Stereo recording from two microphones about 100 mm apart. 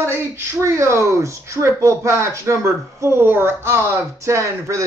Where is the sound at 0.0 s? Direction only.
25° right (ahead or behind).